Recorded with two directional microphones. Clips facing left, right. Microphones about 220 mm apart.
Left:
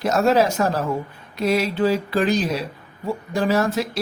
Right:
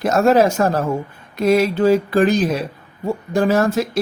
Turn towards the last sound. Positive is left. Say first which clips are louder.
# right 4 dB
turn(degrees=-45)  # may be behind; listen again after turning